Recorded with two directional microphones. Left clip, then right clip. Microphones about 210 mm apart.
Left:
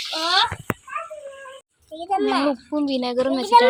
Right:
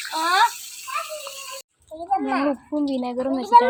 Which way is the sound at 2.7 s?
5° left (ahead or behind).